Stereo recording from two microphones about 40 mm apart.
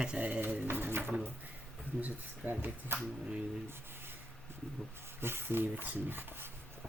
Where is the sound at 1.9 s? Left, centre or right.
Right.